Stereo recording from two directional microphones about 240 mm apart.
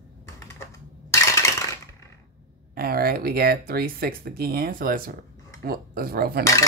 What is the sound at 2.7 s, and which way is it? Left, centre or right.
Speech, right.